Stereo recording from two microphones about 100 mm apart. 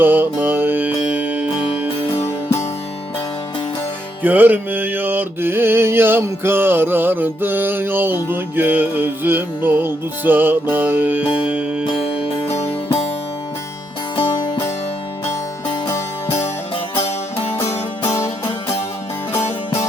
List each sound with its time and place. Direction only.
0.0 s music: 20° right (ahead or behind)
2.2 s music: 25° left (ahead or behind)
4.2 s music: 20° right (ahead or behind)
11.9 s music: 65° left (ahead or behind)
14.2 s music: 55° left (ahead or behind)
18.0 s music: 30° left (ahead or behind)
19.3 s music: 30° left (ahead or behind)